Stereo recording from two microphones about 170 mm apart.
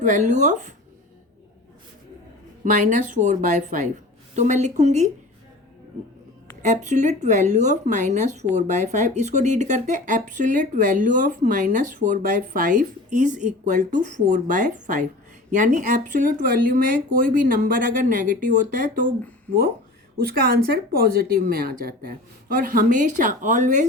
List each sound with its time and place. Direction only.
0.0 s speech: 45° right (ahead or behind)
2.6 s speech: 45° right (ahead or behind)
6.6 s speech: 45° right (ahead or behind)
20.1 s speech: 65° right (ahead or behind); by 23.9 s 45° right (ahead or behind)